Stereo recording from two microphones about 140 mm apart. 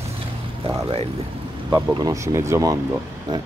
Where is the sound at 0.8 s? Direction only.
45° right (ahead or behind).